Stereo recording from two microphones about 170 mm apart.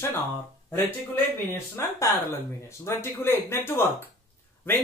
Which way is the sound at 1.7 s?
15° left (ahead or behind).